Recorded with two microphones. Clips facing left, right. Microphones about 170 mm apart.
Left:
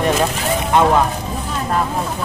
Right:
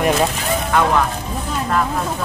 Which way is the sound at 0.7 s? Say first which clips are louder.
Left 3 dB; 25° left (ahead or behind).